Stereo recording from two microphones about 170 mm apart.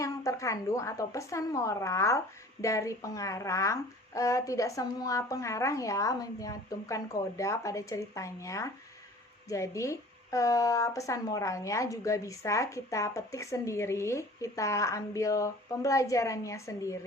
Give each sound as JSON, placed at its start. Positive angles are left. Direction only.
{"t": 0.0, "sound": "speech", "side_deg": 20}